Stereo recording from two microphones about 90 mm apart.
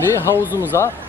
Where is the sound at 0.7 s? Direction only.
35° left (ahead or behind).